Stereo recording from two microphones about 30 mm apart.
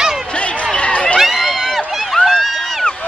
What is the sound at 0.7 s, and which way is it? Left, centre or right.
Run, left.